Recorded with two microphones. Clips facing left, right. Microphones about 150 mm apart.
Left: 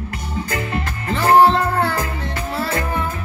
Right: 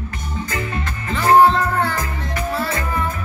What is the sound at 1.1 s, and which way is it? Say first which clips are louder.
Music: even; 30° left (ahead or behind).